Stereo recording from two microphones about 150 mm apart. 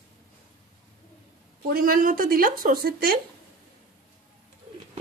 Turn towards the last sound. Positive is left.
turn(degrees=-85)